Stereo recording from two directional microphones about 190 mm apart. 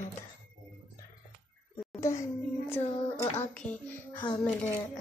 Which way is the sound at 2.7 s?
10° left (ahead or behind).